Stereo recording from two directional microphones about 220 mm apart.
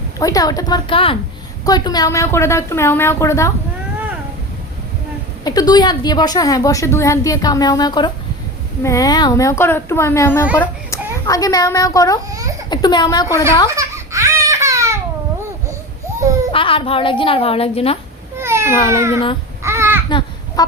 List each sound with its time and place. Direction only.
0.2 s a woman's voice: 15° left (ahead or behind)
5.5 s a woman's voice: 15° left (ahead or behind)
13.7 s crying: 15° right (ahead or behind)
16.5 s a woman's voice: 25° left (ahead or behind)
18.3 s babbling: 10° right (ahead or behind)
18.9 s a child's voice: 10° right (ahead or behind)
19.6 s babbling: 10° right (ahead or behind)
20.1 s a sound: 20° left (ahead or behind)